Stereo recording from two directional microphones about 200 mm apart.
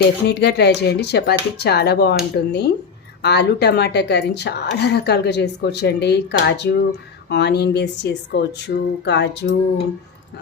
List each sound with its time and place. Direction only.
0.3 s a woman's voice: 55° left (ahead or behind)